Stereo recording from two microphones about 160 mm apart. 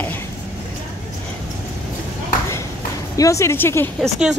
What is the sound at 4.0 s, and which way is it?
Speech, 5° right (ahead or behind).